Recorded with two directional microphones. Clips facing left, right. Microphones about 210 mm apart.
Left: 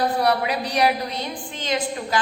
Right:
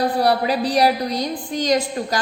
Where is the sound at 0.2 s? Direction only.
35° right (ahead or behind).